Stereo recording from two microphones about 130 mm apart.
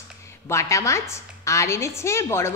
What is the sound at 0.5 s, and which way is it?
A woman's voice, 25° left (ahead or behind).